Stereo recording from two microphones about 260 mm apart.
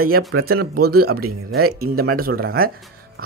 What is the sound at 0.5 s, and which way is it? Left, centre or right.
Speech, right.